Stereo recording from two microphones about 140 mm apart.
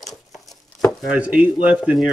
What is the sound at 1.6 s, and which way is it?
Speech, 5° right (ahead or behind).